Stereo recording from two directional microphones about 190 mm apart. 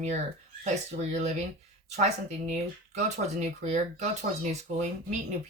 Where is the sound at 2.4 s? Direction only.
35° right (ahead or behind).